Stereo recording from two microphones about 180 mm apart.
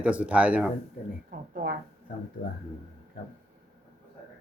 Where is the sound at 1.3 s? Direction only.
50° right (ahead or behind).